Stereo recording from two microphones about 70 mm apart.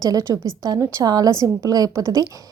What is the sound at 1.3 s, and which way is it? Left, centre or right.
Speech, right.